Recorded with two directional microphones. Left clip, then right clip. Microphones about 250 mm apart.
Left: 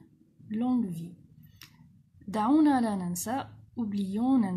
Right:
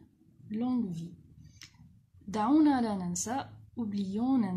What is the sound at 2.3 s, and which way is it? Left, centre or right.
A woman's voice, centre.